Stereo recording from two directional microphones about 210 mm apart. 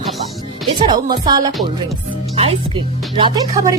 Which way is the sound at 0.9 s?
20° right (ahead or behind).